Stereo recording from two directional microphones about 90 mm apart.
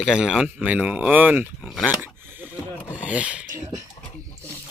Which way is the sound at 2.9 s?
15° right (ahead or behind).